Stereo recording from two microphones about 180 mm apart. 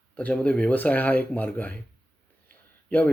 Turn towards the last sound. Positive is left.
turn(degrees=10)  # may be behind; listen again after turning